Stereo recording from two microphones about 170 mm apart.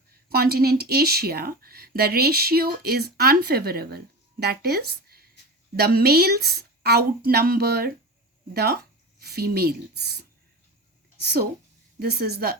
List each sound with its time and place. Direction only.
0.3 s a woman's voice: 65° right (ahead or behind)